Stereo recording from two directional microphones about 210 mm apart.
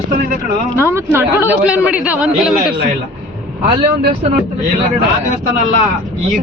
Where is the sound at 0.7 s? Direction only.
10° right (ahead or behind).